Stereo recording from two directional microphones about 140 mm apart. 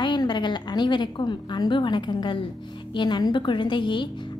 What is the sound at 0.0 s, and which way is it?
A woman's voice, 35° left (ahead or behind).